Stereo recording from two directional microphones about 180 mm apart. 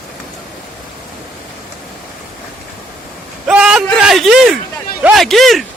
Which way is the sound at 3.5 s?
5° right (ahead or behind).